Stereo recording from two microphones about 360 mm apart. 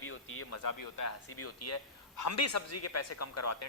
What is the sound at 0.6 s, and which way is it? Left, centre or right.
Speech, left.